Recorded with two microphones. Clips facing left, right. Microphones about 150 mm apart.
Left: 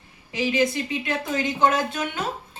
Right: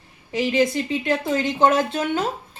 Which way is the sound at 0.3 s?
35° right (ahead or behind).